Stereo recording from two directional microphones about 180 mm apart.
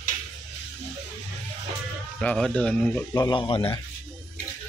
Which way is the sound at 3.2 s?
25° left (ahead or behind).